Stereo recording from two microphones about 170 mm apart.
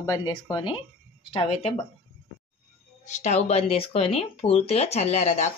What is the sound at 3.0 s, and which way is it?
Speech, 45° left (ahead or behind).